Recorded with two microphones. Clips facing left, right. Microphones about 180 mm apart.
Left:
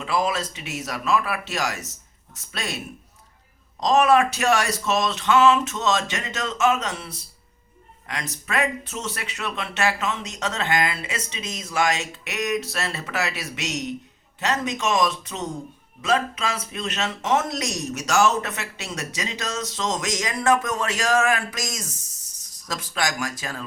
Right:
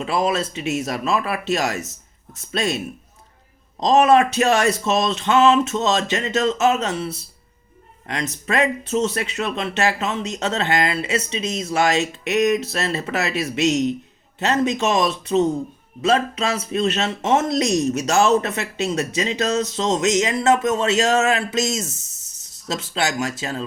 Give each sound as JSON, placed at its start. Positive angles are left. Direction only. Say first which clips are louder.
{"t": 0.0, "sound": "speech", "louder": "right 3 dB", "side_deg": -25}
{"t": 2.5, "sound": "speech", "louder": "right 9 dB", "side_deg": -20}
{"t": 3.8, "sound": "speech", "louder": "right 3 dB", "side_deg": -25}